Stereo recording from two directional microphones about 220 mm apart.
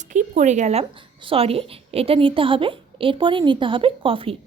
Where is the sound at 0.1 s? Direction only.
35° right (ahead or behind).